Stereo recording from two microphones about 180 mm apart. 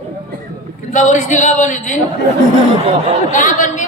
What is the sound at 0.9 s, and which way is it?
A woman's voice, 45° left (ahead or behind).